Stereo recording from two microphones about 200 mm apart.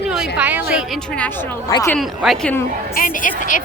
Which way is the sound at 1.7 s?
15° left (ahead or behind).